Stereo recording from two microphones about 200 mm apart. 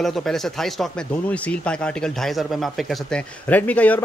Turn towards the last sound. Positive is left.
turn(degrees=10)  # may be behind; listen again after turning